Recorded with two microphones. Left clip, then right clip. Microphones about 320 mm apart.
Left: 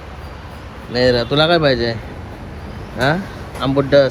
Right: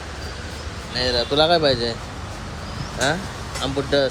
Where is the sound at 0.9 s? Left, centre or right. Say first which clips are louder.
Left 5 dB; centre.